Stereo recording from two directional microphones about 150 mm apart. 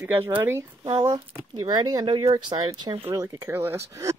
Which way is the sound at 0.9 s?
25° right (ahead or behind).